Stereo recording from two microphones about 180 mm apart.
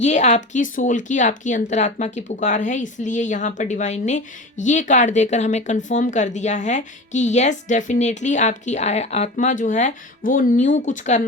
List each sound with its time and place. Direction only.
0.0 s speech: 40° left (ahead or behind)